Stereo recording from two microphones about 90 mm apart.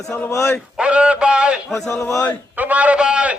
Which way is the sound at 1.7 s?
30° left (ahead or behind).